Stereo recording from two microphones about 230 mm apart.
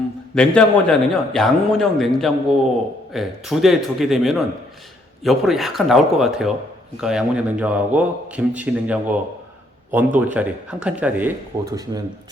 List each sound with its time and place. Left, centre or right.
0.3 s a man's voice: centre